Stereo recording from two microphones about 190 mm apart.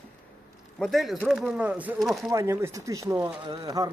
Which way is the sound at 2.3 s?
15° right (ahead or behind).